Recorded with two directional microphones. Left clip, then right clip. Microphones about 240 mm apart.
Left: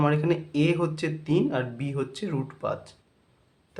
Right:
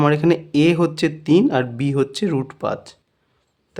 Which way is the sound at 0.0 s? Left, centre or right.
Right.